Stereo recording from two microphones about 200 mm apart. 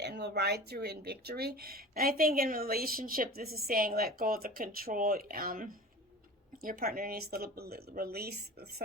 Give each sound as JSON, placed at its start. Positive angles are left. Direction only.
{"t": 0.0, "sound": "speech", "side_deg": -55}